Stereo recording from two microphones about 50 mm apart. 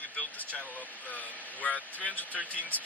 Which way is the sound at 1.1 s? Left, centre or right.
Left.